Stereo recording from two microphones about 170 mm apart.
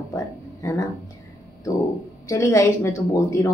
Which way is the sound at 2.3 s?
15° left (ahead or behind).